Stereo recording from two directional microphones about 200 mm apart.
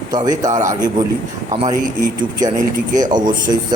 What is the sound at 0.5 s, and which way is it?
Speech, 40° right (ahead or behind).